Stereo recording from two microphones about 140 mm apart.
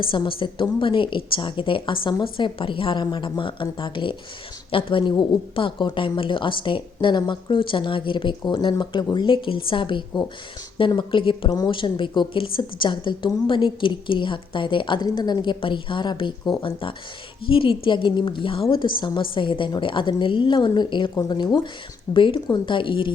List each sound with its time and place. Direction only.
0.1 s a woman's voice: 35° left (ahead or behind)
17.4 s a woman's voice: 40° left (ahead or behind)